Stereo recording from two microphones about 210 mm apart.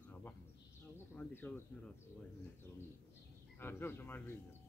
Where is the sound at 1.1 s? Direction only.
10° left (ahead or behind).